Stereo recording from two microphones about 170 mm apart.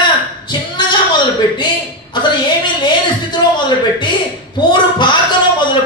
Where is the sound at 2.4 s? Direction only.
25° left (ahead or behind).